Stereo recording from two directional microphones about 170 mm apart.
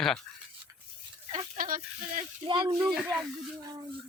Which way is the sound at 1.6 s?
50° right (ahead or behind).